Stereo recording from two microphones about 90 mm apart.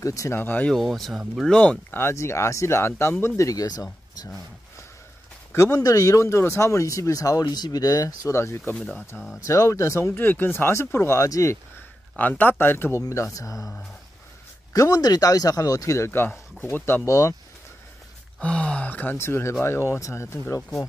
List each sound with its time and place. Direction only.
0.0 s speech: 35° left (ahead or behind)
0.4 s speech: 20° left (ahead or behind)
0.7 s speech: centre (ahead or behind)
1.5 s speech: 15° left (ahead or behind)
2.0 s speech: 30° left (ahead or behind)
3.3 s speech: 40° left (ahead or behind)
5.5 s speech: 35° left (ahead or behind)
8.7 s speech: 5° left (ahead or behind)
9.5 s speech: 35° left (ahead or behind)
12.2 s speech: 20° left (ahead or behind)
13.0 s speech: 35° left (ahead or behind)
14.7 s speech: 40° left (ahead or behind)
16.6 s speech: 25° left (ahead or behind)
18.4 s speech: 15° left (ahead or behind); by 20.6 s 35° left (ahead or behind)